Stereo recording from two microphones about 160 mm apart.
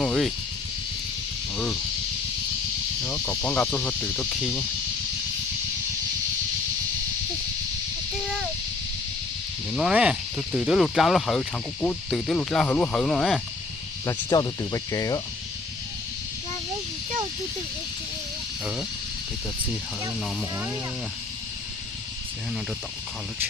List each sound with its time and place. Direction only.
0.0 s a sound: 5° left (ahead or behind)
3.1 s cricket: 10° left (ahead or behind)
9.7 s speech: 5° right (ahead or behind)
14.0 s speech: 25° left (ahead or behind)